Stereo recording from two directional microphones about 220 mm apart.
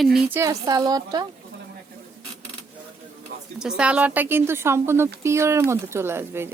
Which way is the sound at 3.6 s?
5° right (ahead or behind).